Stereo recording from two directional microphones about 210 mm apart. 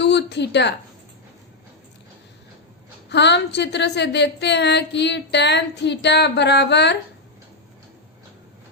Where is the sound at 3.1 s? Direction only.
55° left (ahead or behind).